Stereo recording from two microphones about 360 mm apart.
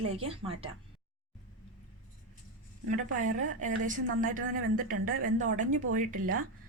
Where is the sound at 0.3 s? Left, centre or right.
Centre.